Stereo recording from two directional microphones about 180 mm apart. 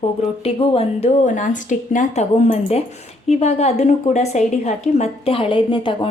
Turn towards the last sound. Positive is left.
turn(degrees=30)  # may be behind; listen again after turning